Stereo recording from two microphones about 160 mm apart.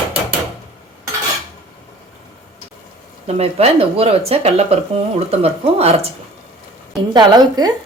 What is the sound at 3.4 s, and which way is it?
Speech, 40° right (ahead or behind).